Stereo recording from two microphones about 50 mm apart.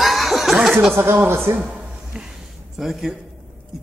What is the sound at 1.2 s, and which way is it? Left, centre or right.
Speech, right.